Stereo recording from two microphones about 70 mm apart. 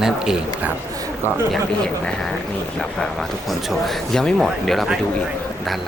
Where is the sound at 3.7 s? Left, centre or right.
Centre.